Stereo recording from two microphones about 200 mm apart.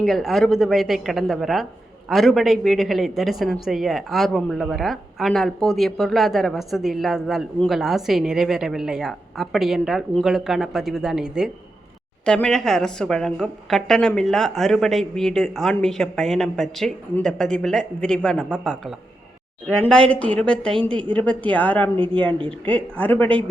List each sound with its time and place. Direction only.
0.0 s a woman's voice: centre (ahead or behind)
21.9 s speech: 25° right (ahead or behind)
22.4 s a woman's voice: 5° left (ahead or behind)